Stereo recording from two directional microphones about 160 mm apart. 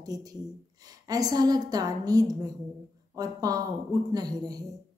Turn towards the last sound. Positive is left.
turn(degrees=-25)  # may be behind; listen again after turning